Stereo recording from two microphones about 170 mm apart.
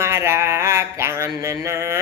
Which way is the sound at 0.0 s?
15° right (ahead or behind).